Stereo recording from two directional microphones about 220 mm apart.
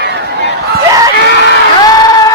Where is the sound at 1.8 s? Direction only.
15° left (ahead or behind).